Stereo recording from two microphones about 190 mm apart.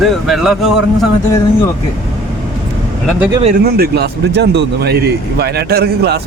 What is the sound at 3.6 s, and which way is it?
Speech, 55° right (ahead or behind).